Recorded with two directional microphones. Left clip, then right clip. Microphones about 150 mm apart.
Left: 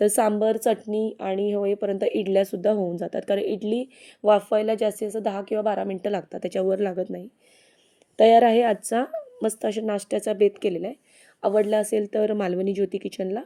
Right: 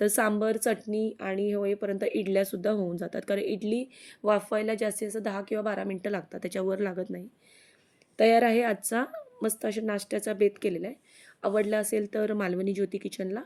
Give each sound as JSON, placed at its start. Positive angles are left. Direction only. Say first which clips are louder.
{"t": 0.0, "sound": "speech", "louder": "left 6 dB", "side_deg": 20}